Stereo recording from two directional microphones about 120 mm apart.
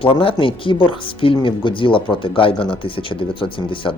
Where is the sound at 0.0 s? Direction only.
50° left (ahead or behind).